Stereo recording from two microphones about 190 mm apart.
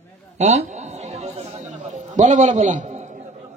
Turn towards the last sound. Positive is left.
turn(degrees=-40)  # may be behind; listen again after turning